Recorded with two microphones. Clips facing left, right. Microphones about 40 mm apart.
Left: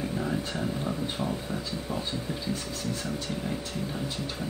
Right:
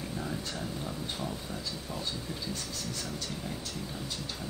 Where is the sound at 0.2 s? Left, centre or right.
Left.